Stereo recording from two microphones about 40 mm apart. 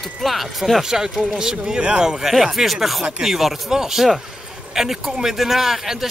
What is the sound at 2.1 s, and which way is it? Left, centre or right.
Speech, centre.